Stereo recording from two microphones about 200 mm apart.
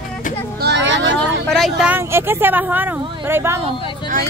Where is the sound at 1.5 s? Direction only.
Centre (ahead or behind).